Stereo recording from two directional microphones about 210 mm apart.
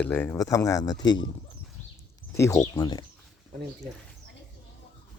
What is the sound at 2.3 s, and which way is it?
Speech, 15° left (ahead or behind).